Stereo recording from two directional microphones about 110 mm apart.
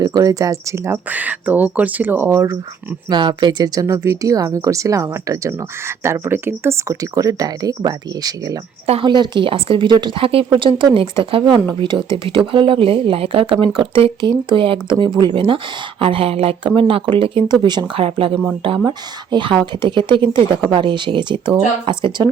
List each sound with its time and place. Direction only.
0.0 s speech: 35° right (ahead or behind)
1.1 s speech: 15° right (ahead or behind)
3.1 s speech: 45° right (ahead or behind)
3.8 s speech: 30° right (ahead or behind); by 18.0 s 45° right (ahead or behind)
18.0 s speech: 55° right (ahead or behind)